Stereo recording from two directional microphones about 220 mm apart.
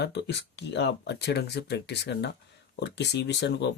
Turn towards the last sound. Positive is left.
turn(degrees=50)  # may be behind; listen again after turning